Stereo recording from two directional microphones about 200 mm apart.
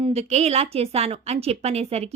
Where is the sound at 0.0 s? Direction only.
35° right (ahead or behind).